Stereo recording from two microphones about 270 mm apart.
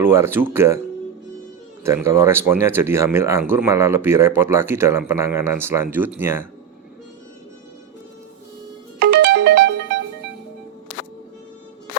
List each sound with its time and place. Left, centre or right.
0.0 s speech: centre
1.8 s speech: centre
9.0 s music: right